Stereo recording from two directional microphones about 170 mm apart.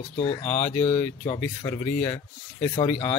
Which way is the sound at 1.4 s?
15° left (ahead or behind).